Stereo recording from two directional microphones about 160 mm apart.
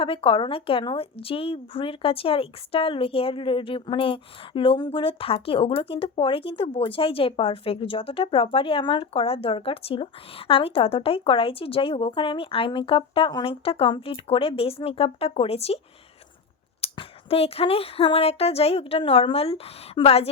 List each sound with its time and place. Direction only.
0.0 s a woman's voice: 35° left (ahead or behind)
16.8 s a woman's voice: 35° left (ahead or behind)